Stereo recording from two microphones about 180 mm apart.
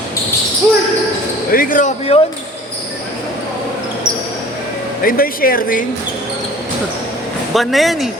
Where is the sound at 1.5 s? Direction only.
50° left (ahead or behind).